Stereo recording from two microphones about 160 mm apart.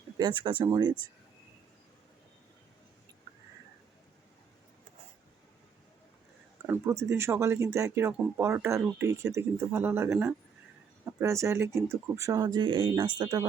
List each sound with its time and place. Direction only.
0.2 s speech: 30° right (ahead or behind)
6.7 s speech: 15° right (ahead or behind)
11.2 s speech: 15° right (ahead or behind)
12.5 s speech: 30° right (ahead or behind)